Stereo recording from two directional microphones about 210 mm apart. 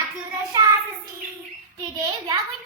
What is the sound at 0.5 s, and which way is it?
Child singing, 15° right (ahead or behind).